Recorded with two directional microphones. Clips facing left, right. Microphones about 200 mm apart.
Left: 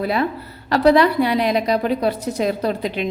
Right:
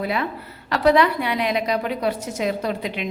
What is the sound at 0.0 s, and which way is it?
A woman's voice, 35° left (ahead or behind).